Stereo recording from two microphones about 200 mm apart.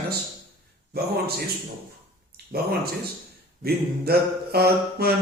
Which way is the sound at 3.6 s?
50° right (ahead or behind).